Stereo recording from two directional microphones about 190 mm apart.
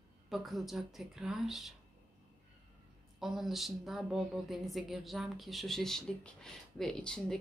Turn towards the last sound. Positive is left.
turn(degrees=5)  # may be behind; listen again after turning